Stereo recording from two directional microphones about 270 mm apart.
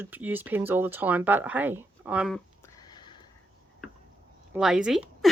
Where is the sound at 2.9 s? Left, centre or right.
Centre.